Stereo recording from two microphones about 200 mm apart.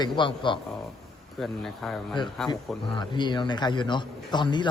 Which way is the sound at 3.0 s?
20° left (ahead or behind).